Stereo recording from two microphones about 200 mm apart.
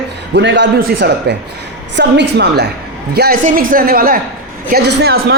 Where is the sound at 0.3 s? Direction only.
60° right (ahead or behind).